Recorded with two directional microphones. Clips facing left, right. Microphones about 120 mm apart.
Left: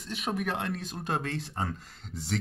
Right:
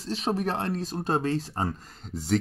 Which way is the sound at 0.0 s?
30° right (ahead or behind).